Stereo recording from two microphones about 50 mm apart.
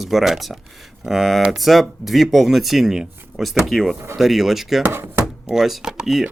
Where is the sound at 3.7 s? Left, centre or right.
Centre.